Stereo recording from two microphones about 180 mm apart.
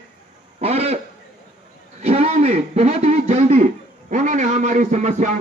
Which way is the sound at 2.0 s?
35° right (ahead or behind).